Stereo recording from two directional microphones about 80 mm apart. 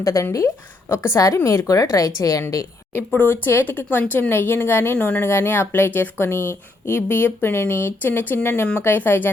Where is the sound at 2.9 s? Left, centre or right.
Left.